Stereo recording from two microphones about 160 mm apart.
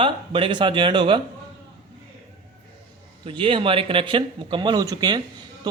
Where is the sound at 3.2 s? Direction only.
30° right (ahead or behind).